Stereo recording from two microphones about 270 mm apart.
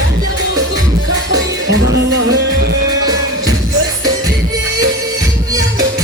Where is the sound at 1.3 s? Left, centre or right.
Right.